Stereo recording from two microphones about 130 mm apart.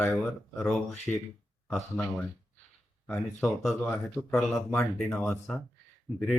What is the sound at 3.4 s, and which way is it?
Speech, centre (ahead or behind).